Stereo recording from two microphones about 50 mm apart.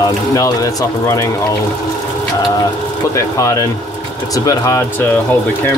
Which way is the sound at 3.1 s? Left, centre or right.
Left.